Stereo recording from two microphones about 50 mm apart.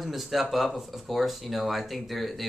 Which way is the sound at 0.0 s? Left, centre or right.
Centre.